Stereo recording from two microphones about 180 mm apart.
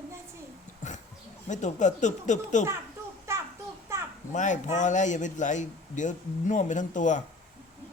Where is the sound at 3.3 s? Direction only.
15° right (ahead or behind).